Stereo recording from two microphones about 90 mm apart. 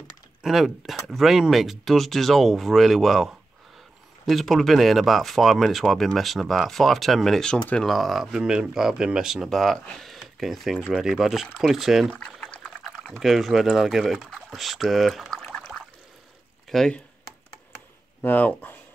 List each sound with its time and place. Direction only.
0.4 s speech: 5° right (ahead or behind)
12.1 s liquid: 5° left (ahead or behind)
13.2 s speech: centre (ahead or behind)
16.6 s chop: centre (ahead or behind)
18.2 s speech: 20° left (ahead or behind)